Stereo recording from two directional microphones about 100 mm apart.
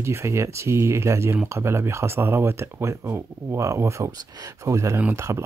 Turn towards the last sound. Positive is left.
turn(degrees=-30)  # may be behind; listen again after turning